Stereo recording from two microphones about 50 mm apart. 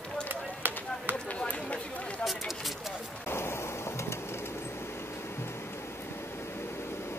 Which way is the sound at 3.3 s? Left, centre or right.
Left.